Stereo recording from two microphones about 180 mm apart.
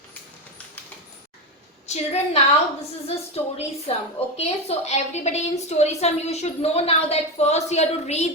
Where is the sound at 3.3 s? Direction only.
35° left (ahead or behind).